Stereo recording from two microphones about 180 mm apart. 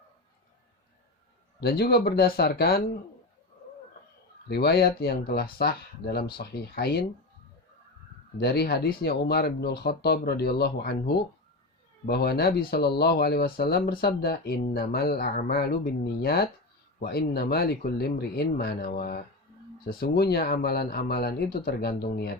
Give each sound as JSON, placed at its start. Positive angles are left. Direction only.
{"t": 1.6, "sound": "speech", "side_deg": 60}
{"t": 4.4, "sound": "speech", "side_deg": 65}
{"t": 8.4, "sound": "speech", "side_deg": 60}